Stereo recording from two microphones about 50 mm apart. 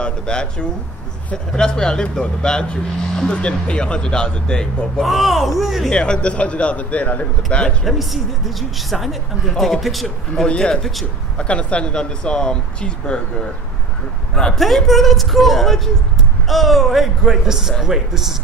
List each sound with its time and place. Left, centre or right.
0.0 s speech: centre
5.0 s speech: centre
5.9 s speech: centre
7.8 s speech: centre
10.3 s speech: centre
14.3 s speech: centre